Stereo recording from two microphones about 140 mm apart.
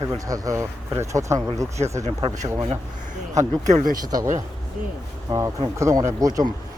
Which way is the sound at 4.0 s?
25° right (ahead or behind).